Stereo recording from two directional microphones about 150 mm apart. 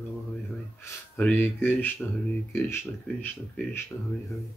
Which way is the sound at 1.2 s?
10° left (ahead or behind).